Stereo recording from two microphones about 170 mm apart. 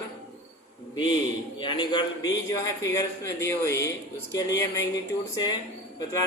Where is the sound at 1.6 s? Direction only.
30° left (ahead or behind).